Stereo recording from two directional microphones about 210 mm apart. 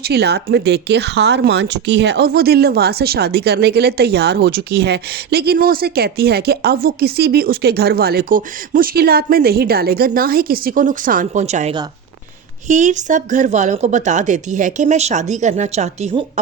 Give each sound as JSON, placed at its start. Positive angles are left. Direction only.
{"t": 0.1, "sound": "speech", "side_deg": -50}